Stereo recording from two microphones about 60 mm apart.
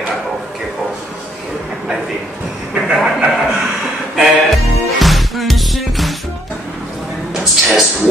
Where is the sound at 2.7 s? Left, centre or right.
Centre.